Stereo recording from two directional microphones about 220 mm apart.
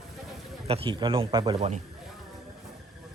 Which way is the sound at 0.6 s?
25° right (ahead or behind).